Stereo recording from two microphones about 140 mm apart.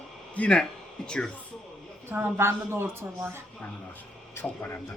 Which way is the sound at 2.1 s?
15° right (ahead or behind).